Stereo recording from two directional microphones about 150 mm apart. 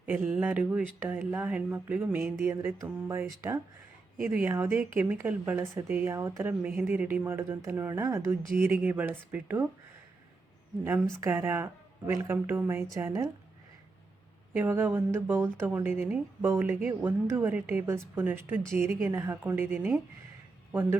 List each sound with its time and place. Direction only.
0.0 s speech: 10° right (ahead or behind)
11.2 s speech: 15° right (ahead or behind)
14.5 s speech: 15° right (ahead or behind)